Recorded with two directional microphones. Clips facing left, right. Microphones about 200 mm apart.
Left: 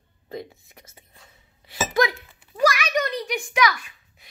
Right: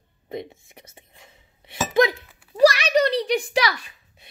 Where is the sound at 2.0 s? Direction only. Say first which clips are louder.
Right 4 dB; 30° right (ahead or behind).